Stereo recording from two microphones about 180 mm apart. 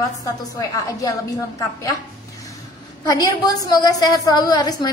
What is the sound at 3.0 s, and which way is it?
A woman's voice, 20° left (ahead or behind).